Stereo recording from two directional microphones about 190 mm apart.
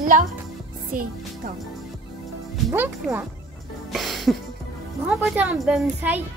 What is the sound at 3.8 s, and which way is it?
Music, centre (ahead or behind).